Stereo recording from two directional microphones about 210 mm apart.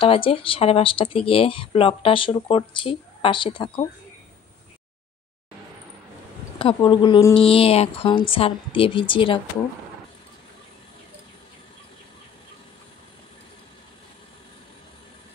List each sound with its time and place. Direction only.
0.0 s speech: 25° left (ahead or behind)
6.6 s speech: 25° left (ahead or behind)